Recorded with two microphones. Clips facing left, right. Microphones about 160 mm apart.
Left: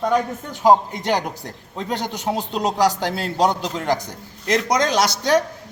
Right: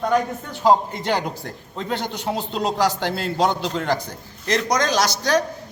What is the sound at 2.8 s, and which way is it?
Speech, 40° left (ahead or behind).